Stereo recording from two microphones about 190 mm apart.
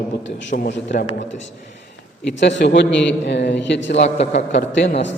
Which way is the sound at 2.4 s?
70° left (ahead or behind).